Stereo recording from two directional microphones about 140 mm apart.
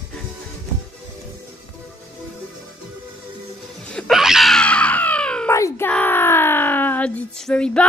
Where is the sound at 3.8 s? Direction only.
5° left (ahead or behind).